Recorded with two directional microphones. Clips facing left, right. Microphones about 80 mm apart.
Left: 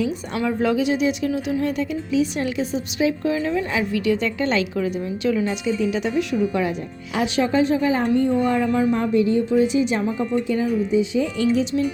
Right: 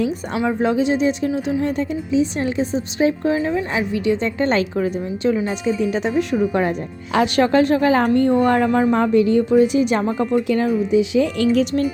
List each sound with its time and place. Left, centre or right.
0.3 s speech: right
6.4 s speech: right
7.1 s a woman's voice: right
8.9 s a woman's voice: right
10.5 s speech: right